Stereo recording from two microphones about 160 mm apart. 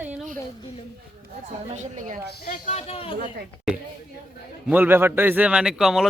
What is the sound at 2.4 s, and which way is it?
Speech, 50° left (ahead or behind).